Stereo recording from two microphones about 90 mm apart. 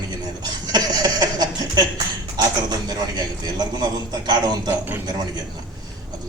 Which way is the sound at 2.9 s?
45° right (ahead or behind).